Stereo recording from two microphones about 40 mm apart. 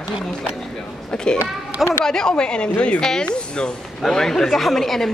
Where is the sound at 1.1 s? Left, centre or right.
Left.